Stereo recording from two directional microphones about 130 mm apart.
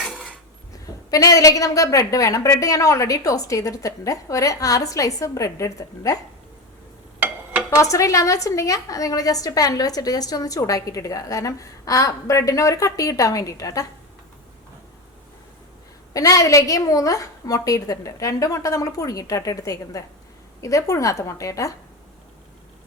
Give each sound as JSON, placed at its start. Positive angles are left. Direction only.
{"t": 0.0, "sound": "cutlery", "side_deg": 0}
{"t": 1.1, "sound": "a woman's voice", "side_deg": 25}
{"t": 7.8, "sound": "a woman's voice", "side_deg": 25}
{"t": 16.1, "sound": "a woman's voice", "side_deg": 25}